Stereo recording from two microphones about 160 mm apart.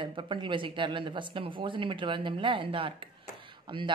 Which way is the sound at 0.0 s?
30° right (ahead or behind).